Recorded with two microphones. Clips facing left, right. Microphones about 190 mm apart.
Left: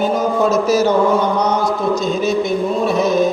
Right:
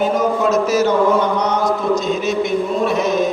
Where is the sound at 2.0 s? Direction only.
35° left (ahead or behind).